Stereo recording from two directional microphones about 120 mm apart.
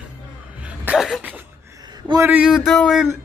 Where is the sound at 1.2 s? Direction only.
15° right (ahead or behind).